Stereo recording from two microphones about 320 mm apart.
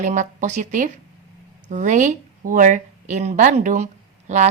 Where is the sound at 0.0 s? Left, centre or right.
Right.